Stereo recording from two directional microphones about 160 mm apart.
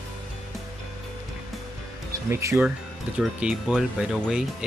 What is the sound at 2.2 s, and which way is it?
Speech, 20° right (ahead or behind).